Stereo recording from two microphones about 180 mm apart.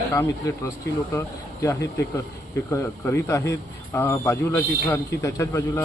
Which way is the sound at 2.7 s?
15° left (ahead or behind).